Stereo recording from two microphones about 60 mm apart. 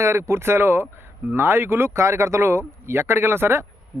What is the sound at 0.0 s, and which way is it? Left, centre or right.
Speech, right.